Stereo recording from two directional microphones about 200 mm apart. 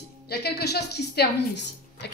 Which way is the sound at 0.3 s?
55° left (ahead or behind).